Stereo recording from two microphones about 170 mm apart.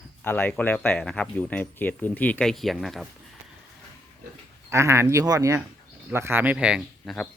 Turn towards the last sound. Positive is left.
turn(degrees=0)  # may be behind; listen again after turning